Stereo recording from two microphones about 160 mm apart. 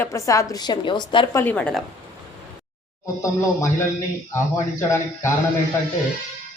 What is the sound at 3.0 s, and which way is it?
Speech, 20° left (ahead or behind).